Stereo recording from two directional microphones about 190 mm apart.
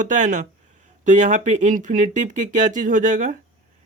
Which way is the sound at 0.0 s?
40° right (ahead or behind).